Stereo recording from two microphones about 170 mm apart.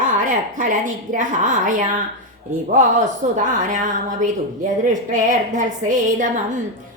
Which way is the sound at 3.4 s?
50° right (ahead or behind).